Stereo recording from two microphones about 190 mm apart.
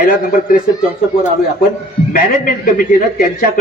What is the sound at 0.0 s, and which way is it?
Speech, 50° left (ahead or behind).